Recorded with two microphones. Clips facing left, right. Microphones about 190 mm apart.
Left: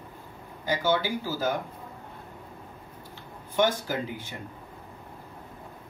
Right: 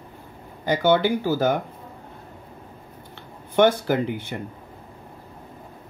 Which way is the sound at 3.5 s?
60° right (ahead or behind).